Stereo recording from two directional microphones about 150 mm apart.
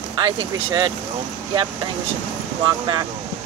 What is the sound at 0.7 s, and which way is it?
Speech, 30° right (ahead or behind).